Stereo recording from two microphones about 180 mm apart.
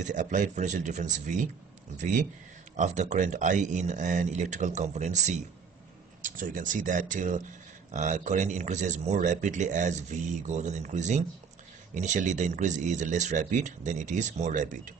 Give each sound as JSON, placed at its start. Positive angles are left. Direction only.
{"t": 0.0, "sound": "speech", "side_deg": -45}
{"t": 2.7, "sound": "speech", "side_deg": -45}